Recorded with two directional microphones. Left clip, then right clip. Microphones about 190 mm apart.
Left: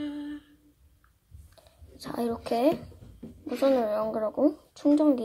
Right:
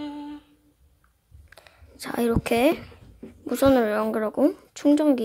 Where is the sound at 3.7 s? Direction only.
45° right (ahead or behind).